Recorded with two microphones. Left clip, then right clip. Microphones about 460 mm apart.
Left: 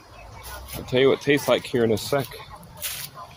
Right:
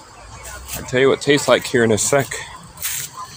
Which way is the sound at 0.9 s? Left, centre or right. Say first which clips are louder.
Right 4 dB; left.